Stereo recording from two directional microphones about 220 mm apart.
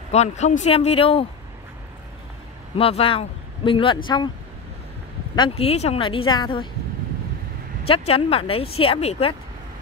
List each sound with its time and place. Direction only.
0.1 s speech: 30° left (ahead or behind)
2.8 s speech: 25° left (ahead or behind)
5.6 s speech: 30° left (ahead or behind)
7.8 s speech: 25° left (ahead or behind)